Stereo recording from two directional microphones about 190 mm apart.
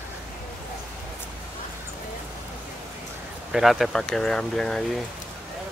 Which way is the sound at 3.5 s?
Centre (ahead or behind).